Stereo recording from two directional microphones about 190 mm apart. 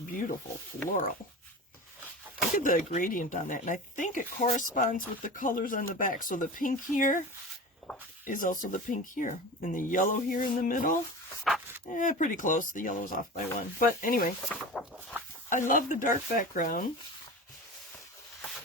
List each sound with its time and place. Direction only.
0.9 s speech: 45° left (ahead or behind)
2.6 s speech: 45° left (ahead or behind)
8.3 s speech: 45° left (ahead or behind)
11.5 s speech: centre (ahead or behind)
11.9 s speech: 45° left (ahead or behind)
14.5 s a sound: centre (ahead or behind)
15.4 s speech: 45° left (ahead or behind)